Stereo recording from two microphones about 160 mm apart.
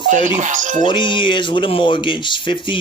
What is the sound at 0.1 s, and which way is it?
Speech, 50° right (ahead or behind).